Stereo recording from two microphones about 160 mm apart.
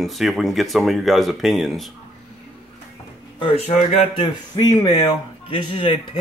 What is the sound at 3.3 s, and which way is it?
Speech, 35° left (ahead or behind).